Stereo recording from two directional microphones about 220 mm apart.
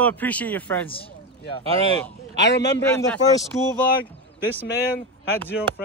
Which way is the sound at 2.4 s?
50° left (ahead or behind).